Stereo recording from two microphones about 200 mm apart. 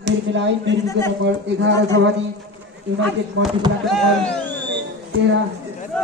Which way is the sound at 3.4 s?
90° right.